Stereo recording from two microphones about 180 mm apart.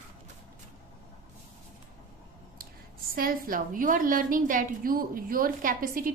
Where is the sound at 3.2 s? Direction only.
50° right (ahead or behind).